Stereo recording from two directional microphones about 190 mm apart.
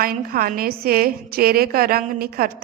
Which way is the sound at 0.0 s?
50° right (ahead or behind).